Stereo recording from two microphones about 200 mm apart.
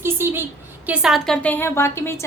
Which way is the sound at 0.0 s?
10° right (ahead or behind).